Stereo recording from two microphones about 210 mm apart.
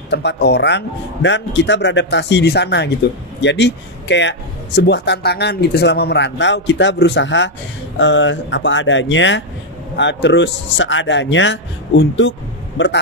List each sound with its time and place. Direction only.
0.1 s a man's voice: 55° left (ahead or behind)